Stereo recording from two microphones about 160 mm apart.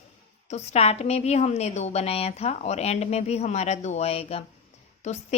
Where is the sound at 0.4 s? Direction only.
45° left (ahead or behind).